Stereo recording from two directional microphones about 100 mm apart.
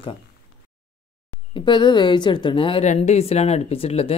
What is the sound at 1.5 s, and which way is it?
Speech, 50° left (ahead or behind).